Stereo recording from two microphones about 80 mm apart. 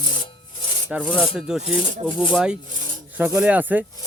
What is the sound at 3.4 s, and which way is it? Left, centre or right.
Rub, centre.